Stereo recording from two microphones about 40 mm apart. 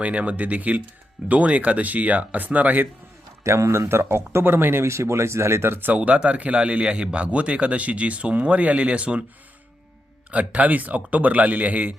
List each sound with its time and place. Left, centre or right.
0.0 s a man's voice: right
3.7 s speech: right
5.9 s a man's voice: right
10.3 s a man's voice: right